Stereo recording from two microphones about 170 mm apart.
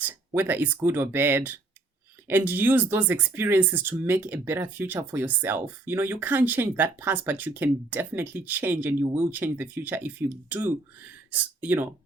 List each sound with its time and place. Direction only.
0.0 s speech: 10° right (ahead or behind)